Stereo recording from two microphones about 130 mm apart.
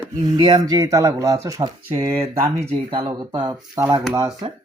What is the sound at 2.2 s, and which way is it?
Speech, 50° right (ahead or behind).